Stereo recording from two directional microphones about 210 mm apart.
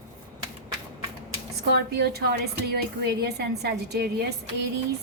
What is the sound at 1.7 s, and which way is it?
A woman's voice, 50° right (ahead or behind).